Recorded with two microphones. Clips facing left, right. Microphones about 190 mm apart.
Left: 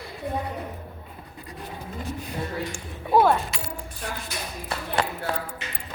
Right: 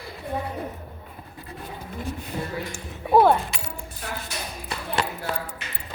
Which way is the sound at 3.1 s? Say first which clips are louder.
Right 2 dB; 15° right (ahead or behind).